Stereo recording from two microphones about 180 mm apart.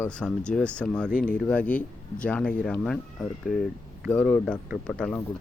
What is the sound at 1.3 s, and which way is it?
Speech, 5° left (ahead or behind).